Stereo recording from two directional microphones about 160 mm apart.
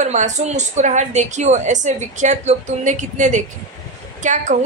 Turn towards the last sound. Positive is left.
turn(degrees=-50)  # may be behind; listen again after turning